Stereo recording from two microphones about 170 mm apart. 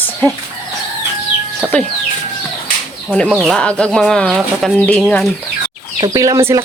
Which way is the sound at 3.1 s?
Centre (ahead or behind).